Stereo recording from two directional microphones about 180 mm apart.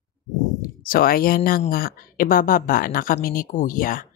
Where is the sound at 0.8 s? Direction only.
55° left (ahead or behind).